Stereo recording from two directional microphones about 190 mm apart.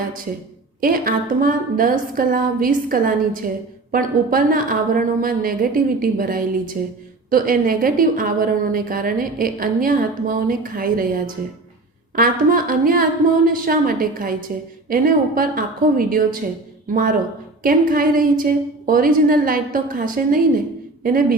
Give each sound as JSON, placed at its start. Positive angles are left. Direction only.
{"t": 0.8, "sound": "a woman's voice", "side_deg": -50}